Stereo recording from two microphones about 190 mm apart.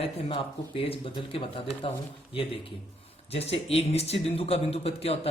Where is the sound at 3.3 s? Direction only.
35° left (ahead or behind).